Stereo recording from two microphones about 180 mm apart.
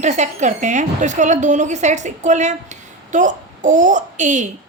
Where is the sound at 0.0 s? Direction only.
40° right (ahead or behind).